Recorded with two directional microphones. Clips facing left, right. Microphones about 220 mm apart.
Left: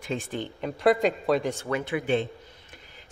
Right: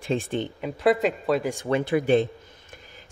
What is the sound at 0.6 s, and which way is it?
Speech, centre (ahead or behind).